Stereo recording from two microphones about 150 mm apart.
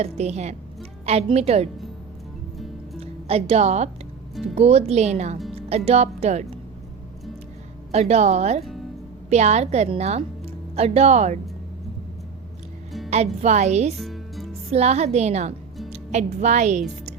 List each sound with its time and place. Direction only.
0.0 s a woman's voice: 45° right (ahead or behind)
3.0 s a woman's voice: 40° right (ahead or behind)
7.9 s a woman's voice: 45° right (ahead or behind)
13.1 s a woman's voice: 45° right (ahead or behind)
14.0 s music: centre (ahead or behind)
14.7 s a woman's voice: 45° right (ahead or behind)